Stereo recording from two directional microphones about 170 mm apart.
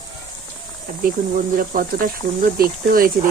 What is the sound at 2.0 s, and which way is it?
Speech, 60° right (ahead or behind).